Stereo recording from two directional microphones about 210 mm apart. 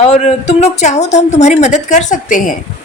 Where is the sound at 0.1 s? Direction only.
30° left (ahead or behind).